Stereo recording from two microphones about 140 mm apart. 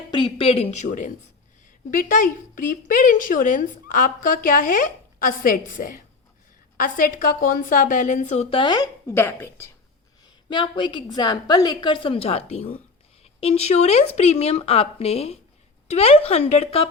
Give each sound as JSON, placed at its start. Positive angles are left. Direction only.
{"t": 0.1, "sound": "a woman's voice", "side_deg": 35}
{"t": 1.9, "sound": "speech", "side_deg": 75}
{"t": 10.5, "sound": "a woman's voice", "side_deg": 35}